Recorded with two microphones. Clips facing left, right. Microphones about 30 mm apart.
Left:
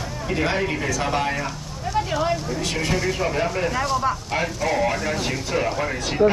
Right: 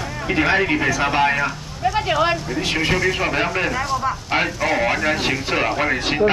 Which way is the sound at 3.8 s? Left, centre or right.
Centre.